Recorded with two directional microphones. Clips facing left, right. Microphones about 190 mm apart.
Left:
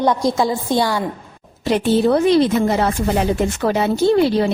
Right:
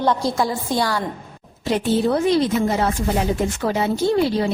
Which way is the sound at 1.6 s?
70° left (ahead or behind).